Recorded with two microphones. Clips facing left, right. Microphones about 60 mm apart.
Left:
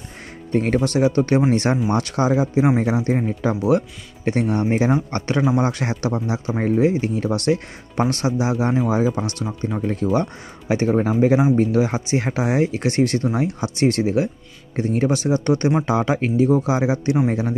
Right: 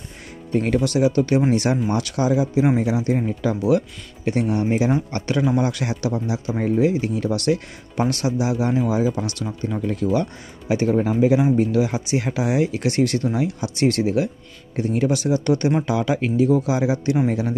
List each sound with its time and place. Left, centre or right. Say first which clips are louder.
0.5 s speech: left 1 dB; left